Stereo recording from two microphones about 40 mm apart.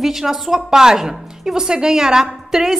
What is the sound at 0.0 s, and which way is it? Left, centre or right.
A woman's voice, centre.